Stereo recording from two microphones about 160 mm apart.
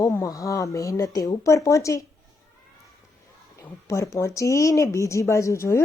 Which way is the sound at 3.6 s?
20° left (ahead or behind).